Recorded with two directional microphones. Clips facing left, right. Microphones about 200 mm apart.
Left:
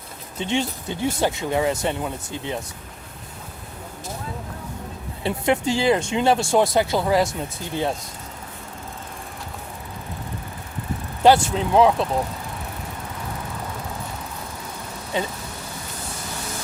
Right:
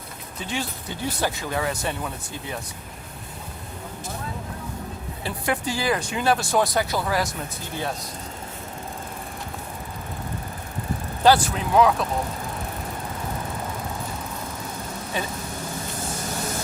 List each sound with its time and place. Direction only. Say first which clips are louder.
0.3 s speech: left 6 dB; 25° left (ahead or behind)
5.2 s speech: left 6 dB; 25° left (ahead or behind)
11.2 s speech: left 3 dB; 25° left (ahead or behind)
15.1 s speech: left 4 dB; 20° left (ahead or behind)